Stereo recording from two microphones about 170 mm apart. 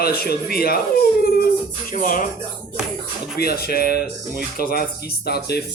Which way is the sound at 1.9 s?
55° left (ahead or behind).